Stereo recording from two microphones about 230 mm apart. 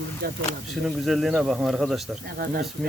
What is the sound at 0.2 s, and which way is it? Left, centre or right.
Speech, right.